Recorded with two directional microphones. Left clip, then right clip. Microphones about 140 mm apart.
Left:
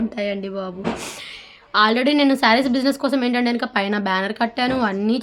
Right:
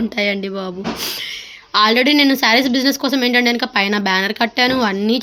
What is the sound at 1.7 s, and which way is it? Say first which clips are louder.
Speech: right 4 dB; 10° right (ahead or behind).